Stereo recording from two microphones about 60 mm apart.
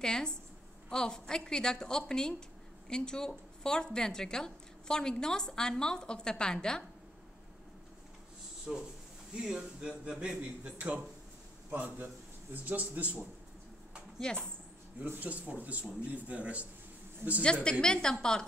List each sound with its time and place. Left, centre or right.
0.0 s a woman's voice: centre
8.7 s speech: centre
11.7 s a man's voice: right
14.2 s a woman's voice: centre
15.0 s speech: right
17.2 s speech: right
17.6 s a woman's voice: centre